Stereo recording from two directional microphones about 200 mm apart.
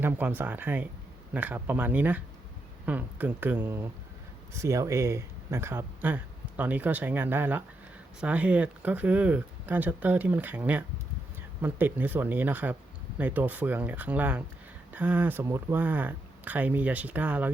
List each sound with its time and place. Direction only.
0.0 s speech: 10° right (ahead or behind)